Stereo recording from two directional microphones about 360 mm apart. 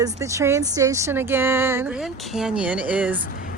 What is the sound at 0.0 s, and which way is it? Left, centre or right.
Speech, centre.